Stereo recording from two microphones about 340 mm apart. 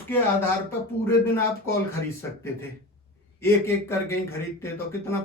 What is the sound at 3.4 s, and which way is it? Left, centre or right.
A man's voice, centre.